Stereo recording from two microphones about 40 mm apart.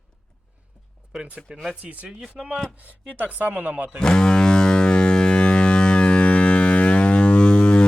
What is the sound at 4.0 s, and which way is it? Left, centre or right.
Ship, left.